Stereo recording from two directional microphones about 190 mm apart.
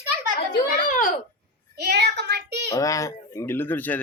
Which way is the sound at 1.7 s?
60° right (ahead or behind).